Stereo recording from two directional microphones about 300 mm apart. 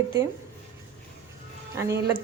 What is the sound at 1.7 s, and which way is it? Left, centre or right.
Speech, centre.